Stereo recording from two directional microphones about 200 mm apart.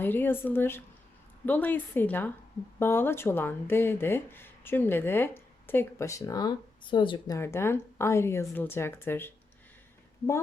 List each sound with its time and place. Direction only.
0.0 s speech: 10° left (ahead or behind)